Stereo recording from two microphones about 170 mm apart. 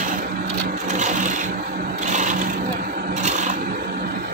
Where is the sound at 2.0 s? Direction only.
45° right (ahead or behind).